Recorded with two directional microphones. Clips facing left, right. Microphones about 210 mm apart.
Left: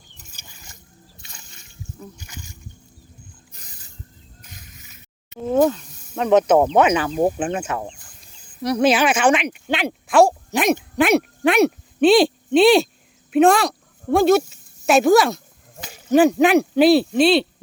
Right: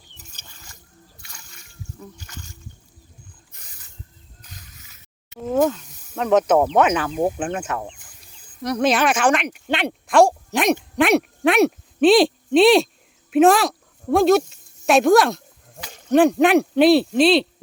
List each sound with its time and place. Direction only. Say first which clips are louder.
0.3 s a sound: left 3 dB; 10° left (ahead or behind)
1.2 s splash: left 1 dB; 25° left (ahead or behind)
2.1 s speech: left 1 dB; 10° left (ahead or behind)
5.4 s speech: left 2 dB; centre (ahead or behind)
13.3 s a sound: even; centre (ahead or behind)
15.9 s speech: left 1 dB; 5° left (ahead or behind)